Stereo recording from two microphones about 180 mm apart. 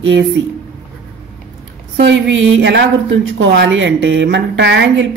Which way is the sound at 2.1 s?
85° right.